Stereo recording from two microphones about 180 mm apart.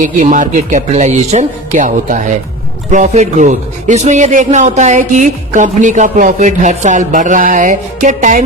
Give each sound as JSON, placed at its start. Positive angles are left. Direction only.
{"t": 0.0, "sound": "a man's voice", "side_deg": -45}